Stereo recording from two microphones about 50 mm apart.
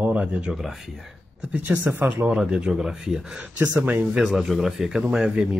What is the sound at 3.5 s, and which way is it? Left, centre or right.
Speech, right.